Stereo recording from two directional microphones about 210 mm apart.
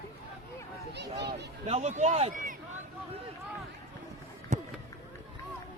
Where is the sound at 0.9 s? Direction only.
55° right (ahead or behind).